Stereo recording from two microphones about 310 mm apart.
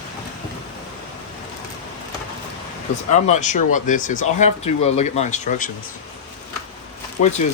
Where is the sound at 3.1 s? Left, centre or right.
Left.